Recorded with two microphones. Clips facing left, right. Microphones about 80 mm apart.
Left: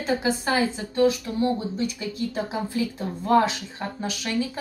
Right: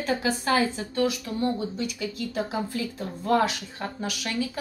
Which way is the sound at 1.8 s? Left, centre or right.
Left.